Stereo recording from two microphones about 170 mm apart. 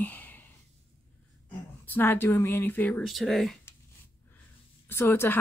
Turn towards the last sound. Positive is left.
turn(degrees=15)  # may be behind; listen again after turning